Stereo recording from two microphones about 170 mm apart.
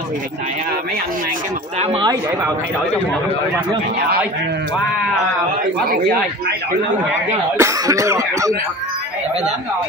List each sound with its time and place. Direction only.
1.8 s speech: 30° right (ahead or behind)
7.5 s speech: 20° right (ahead or behind)